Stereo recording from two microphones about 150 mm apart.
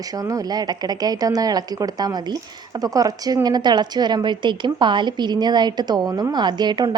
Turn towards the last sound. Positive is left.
turn(degrees=-30)  # may be behind; listen again after turning